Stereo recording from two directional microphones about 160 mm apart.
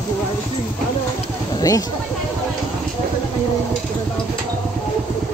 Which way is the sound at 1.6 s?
20° left (ahead or behind).